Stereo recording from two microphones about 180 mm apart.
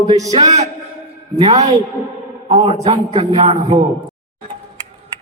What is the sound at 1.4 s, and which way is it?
A man's voice, 40° right (ahead or behind).